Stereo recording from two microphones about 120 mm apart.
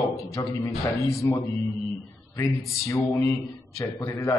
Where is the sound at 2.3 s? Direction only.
20° left (ahead or behind).